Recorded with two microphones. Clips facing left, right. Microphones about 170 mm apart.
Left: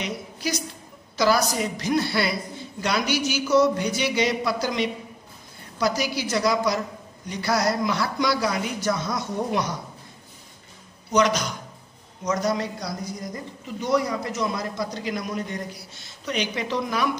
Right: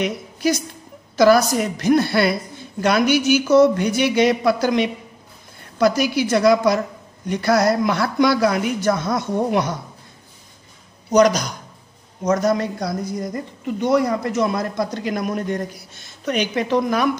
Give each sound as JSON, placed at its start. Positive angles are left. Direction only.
{"t": 0.0, "sound": "a woman's voice", "side_deg": -50}
{"t": 11.1, "sound": "speech", "side_deg": -40}
{"t": 12.3, "sound": "speech", "side_deg": -50}